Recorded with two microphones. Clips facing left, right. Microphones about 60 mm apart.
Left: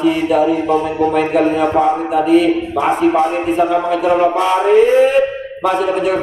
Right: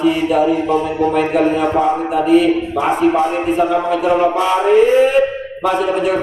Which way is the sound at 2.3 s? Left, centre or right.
Left.